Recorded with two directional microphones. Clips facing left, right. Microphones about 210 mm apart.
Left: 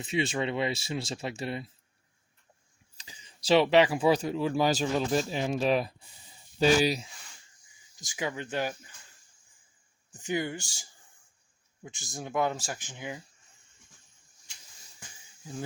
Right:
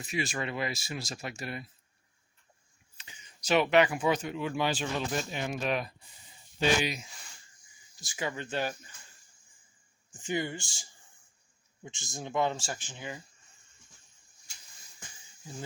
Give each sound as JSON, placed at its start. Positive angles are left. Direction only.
{"t": 0.0, "sound": "speech", "side_deg": 30}
{"t": 3.0, "sound": "speech", "side_deg": 35}
{"t": 7.9, "sound": "speech", "side_deg": 15}
{"t": 10.2, "sound": "speech", "side_deg": 10}
{"t": 12.2, "sound": "speech", "side_deg": 10}